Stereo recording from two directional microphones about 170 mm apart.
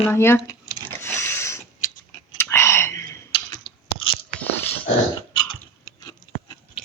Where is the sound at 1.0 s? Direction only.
15° left (ahead or behind).